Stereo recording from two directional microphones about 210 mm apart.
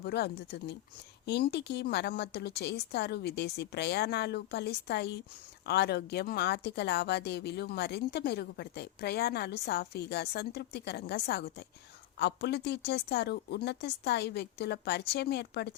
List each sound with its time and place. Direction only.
0.0 s speech: 50° left (ahead or behind)